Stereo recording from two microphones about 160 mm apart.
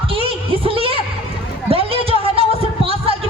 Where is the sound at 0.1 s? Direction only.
35° right (ahead or behind).